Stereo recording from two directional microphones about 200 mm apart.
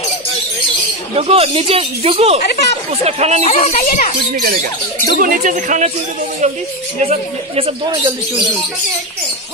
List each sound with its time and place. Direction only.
1.1 s speech: 30° right (ahead or behind)
3.4 s a child's voice: 30° left (ahead or behind)
4.3 s speech: 45° right (ahead or behind)
7.0 s speech: 30° right (ahead or behind)